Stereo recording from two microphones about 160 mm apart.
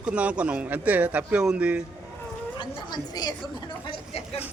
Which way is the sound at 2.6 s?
30° left (ahead or behind).